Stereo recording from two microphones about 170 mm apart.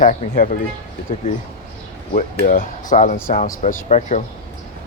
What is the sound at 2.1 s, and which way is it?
Speech, 55° left (ahead or behind).